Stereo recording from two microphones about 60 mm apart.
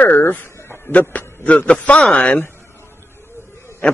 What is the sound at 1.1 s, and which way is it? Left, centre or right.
A man's voice, left.